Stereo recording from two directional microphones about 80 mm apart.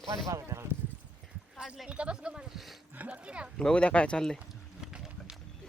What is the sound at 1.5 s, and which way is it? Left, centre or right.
Speech, centre.